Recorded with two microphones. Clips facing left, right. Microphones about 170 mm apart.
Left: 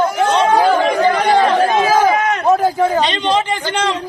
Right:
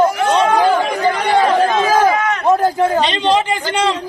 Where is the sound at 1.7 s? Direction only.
10° left (ahead or behind).